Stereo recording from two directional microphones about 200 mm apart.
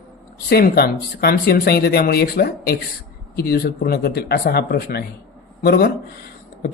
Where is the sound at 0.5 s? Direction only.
50° left (ahead or behind).